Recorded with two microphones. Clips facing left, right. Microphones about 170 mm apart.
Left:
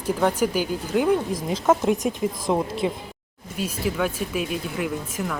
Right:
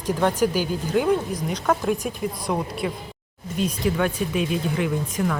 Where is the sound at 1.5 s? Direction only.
20° left (ahead or behind).